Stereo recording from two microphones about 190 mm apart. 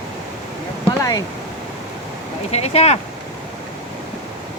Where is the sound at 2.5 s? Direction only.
35° left (ahead or behind).